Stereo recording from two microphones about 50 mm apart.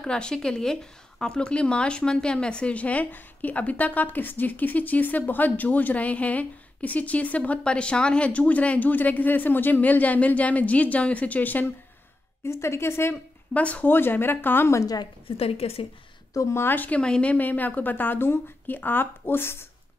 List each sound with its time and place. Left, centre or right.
0.0 s speech: centre; by 11.6 s left
12.4 s speech: left
13.5 s speech: left
13.8 s speech: left
16.6 s speech: left
17.0 s speech: centre
17.3 s speech: left